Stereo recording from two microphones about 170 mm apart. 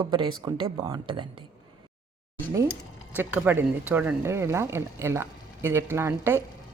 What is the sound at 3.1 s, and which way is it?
Speech, 10° right (ahead or behind).